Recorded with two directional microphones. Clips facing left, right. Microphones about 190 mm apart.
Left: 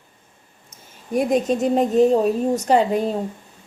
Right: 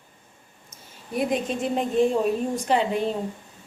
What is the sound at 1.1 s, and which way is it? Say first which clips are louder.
Speech: left 6 dB; 40° left (ahead or behind).